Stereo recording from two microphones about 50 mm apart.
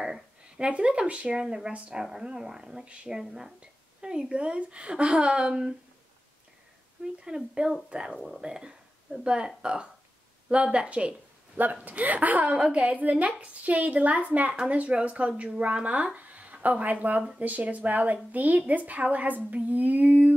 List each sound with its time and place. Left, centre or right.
0.6 s speech: right
7.2 s speech: centre
11.5 s speech: right